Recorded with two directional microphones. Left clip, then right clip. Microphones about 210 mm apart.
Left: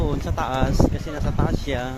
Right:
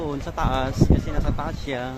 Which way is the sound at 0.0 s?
10° left (ahead or behind).